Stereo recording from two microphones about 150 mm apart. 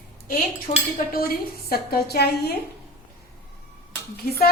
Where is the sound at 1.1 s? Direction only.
75° left (ahead or behind).